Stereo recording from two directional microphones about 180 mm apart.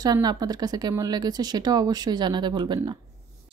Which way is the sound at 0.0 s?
20° right (ahead or behind).